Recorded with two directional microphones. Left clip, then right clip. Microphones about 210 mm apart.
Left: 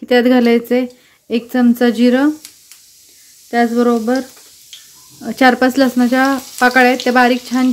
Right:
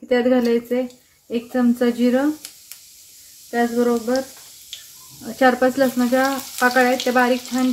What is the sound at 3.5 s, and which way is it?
Speech, 50° left (ahead or behind).